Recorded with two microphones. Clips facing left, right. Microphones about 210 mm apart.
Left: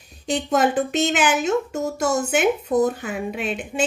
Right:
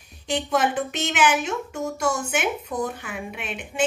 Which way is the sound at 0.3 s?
35° left (ahead or behind).